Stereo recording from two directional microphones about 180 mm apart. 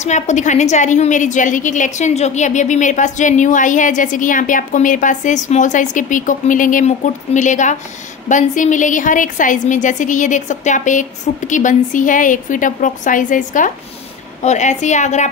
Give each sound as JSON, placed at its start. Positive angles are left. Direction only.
{"t": 0.0, "sound": "a woman's voice", "side_deg": 40}